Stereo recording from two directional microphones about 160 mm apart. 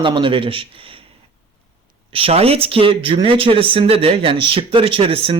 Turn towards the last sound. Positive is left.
turn(degrees=-35)  # may be behind; listen again after turning